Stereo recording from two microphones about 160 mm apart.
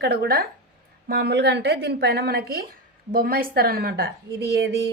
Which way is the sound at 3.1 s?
65° right (ahead or behind).